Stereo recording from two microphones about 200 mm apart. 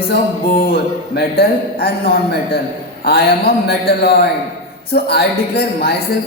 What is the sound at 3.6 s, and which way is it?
A woman's voice, 50° left (ahead or behind).